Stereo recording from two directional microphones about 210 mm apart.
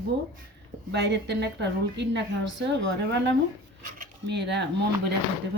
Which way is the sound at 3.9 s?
45° right (ahead or behind).